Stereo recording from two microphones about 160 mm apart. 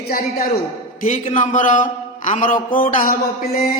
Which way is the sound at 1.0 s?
50° left (ahead or behind).